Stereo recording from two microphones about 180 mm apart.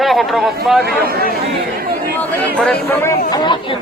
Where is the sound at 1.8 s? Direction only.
55° right (ahead or behind).